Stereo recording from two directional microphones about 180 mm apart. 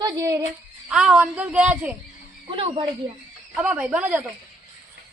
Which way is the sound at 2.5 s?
25° right (ahead or behind).